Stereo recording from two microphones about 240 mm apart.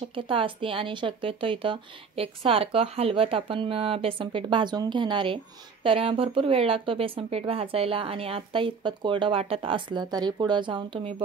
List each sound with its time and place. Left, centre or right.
0.1 s speech: right